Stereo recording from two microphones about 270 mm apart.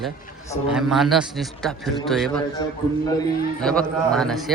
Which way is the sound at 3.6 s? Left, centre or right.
Centre.